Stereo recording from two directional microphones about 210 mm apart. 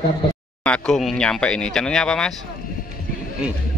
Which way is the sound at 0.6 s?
5° left (ahead or behind).